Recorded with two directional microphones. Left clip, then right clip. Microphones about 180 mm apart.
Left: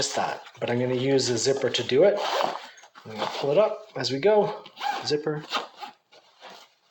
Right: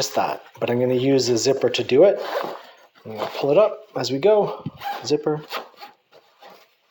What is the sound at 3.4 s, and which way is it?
Speech, 45° right (ahead or behind).